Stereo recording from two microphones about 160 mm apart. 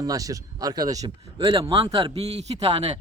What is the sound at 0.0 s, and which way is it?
Speech, 20° right (ahead or behind).